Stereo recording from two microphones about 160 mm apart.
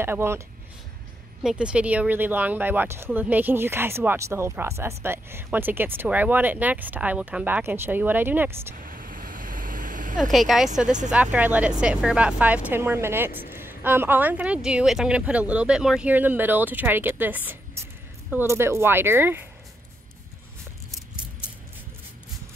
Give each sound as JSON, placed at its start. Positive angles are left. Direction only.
{"t": 0.0, "sound": "speech", "side_deg": -15}
{"t": 1.4, "sound": "speech", "side_deg": -5}
{"t": 8.8, "sound": "vehicle", "side_deg": -60}
{"t": 10.3, "sound": "speech", "side_deg": 0}